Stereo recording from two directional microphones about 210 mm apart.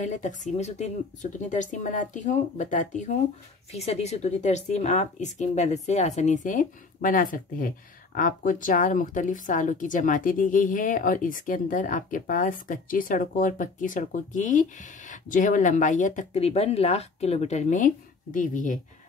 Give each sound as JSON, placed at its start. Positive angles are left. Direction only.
{"t": 0.0, "sound": "speech", "side_deg": 35}